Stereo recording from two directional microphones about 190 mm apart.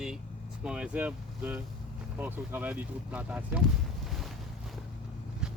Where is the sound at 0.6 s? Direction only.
5° right (ahead or behind).